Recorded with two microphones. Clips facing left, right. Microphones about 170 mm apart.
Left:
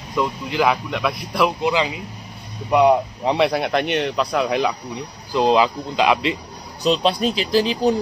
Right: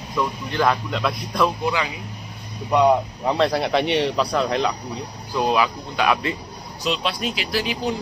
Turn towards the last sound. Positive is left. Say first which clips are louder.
# left 7 dB
turn(degrees=30)  # may be behind; listen again after turning